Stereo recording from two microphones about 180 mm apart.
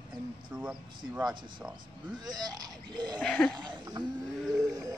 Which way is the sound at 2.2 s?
20° right (ahead or behind).